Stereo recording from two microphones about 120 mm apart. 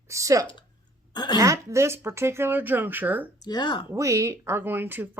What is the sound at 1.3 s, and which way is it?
Speech, 25° right (ahead or behind).